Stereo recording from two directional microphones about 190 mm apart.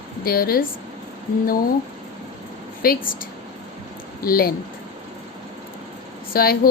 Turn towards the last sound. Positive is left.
turn(degrees=50)  # may be behind; listen again after turning